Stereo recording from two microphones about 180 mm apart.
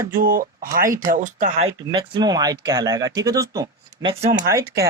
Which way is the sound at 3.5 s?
20° right (ahead or behind).